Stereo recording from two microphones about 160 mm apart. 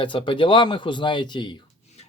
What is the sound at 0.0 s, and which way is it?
Speech, 30° left (ahead or behind).